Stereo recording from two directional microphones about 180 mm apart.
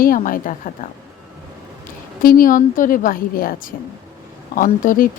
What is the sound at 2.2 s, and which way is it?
Speech, 50° left (ahead or behind).